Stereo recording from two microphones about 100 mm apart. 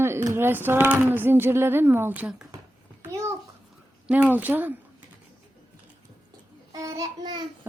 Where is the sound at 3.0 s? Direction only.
25° right (ahead or behind).